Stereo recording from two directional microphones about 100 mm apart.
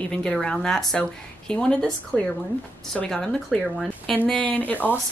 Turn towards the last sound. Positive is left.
turn(degrees=15)  # may be behind; listen again after turning